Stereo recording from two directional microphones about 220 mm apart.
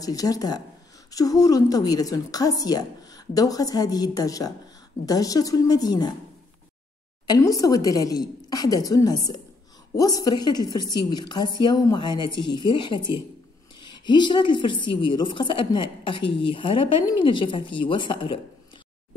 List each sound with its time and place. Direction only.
0.0 s a woman's voice: 15° left (ahead or behind)
7.2 s a woman's voice: 15° left (ahead or behind)